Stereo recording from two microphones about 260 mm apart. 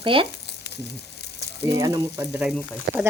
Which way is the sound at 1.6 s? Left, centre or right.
Centre.